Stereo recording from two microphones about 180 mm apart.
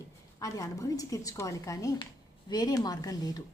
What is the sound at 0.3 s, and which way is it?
A woman's voice, 20° left (ahead or behind).